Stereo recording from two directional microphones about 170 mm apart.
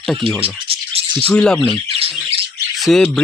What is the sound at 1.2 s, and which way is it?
Speech, 5° left (ahead or behind).